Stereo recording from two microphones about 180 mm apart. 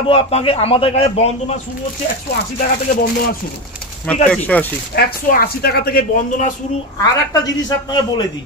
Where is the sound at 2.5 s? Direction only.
50° left (ahead or behind).